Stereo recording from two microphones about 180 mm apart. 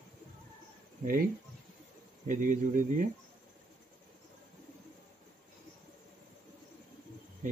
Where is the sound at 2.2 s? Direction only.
45° right (ahead or behind).